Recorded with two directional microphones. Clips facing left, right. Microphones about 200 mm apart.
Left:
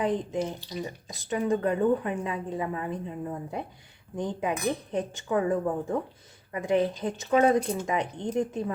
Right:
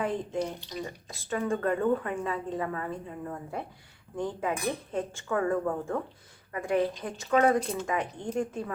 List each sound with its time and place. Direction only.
0.0 s speech: 20° left (ahead or behind)